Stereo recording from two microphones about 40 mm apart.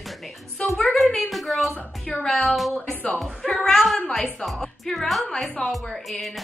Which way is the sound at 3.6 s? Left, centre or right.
Centre.